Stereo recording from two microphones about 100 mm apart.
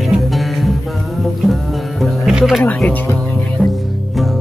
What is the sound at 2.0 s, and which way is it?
Music, centre (ahead or behind).